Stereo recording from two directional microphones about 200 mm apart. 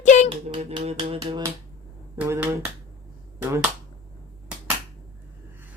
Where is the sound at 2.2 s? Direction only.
10° right (ahead or behind).